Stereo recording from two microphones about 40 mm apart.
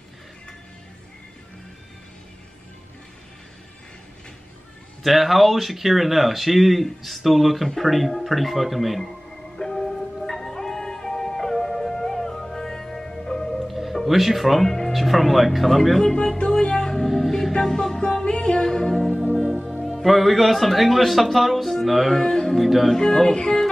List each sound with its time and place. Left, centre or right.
5.0 s speech: centre
9.6 s music: centre
14.0 s speech: centre
16.3 s music: left
16.9 s music: centre
19.8 s speech: centre
22.2 s music: centre
22.6 s speech: centre
22.9 s speech: centre
23.3 s music: centre